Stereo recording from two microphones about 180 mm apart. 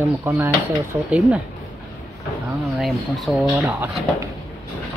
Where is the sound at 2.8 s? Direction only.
Centre (ahead or behind).